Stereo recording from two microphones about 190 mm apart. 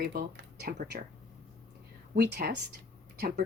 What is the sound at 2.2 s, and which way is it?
Speech, 55° right (ahead or behind).